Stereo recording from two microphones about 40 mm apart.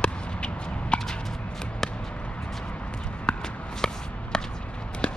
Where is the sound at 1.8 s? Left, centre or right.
Centre.